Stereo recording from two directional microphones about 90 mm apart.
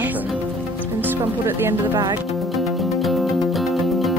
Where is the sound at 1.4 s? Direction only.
25° right (ahead or behind).